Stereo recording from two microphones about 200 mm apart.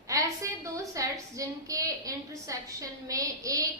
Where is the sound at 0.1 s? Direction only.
15° right (ahead or behind).